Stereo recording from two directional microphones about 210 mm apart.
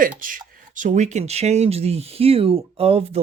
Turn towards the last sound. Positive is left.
turn(degrees=-30)  # may be behind; listen again after turning